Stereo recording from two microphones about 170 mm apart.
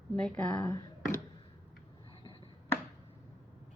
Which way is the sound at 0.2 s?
5° left (ahead or behind).